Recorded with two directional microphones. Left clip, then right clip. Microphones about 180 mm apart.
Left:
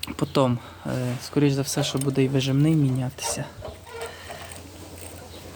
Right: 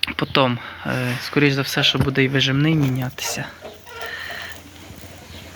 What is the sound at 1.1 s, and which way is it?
Speech, 10° right (ahead or behind).